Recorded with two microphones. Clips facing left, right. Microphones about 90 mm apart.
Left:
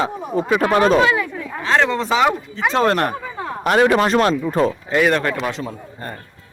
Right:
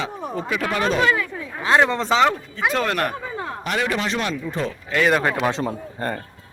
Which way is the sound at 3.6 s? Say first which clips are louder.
Left 10 dB; 50° left (ahead or behind).